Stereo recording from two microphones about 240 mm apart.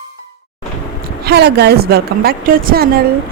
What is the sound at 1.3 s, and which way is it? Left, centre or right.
Speech, right.